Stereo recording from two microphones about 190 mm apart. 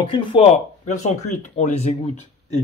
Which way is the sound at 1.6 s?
35° left (ahead or behind).